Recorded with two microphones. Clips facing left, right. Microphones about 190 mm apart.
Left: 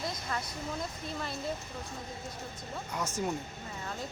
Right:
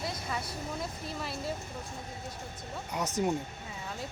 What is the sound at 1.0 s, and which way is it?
Speech, 5° right (ahead or behind).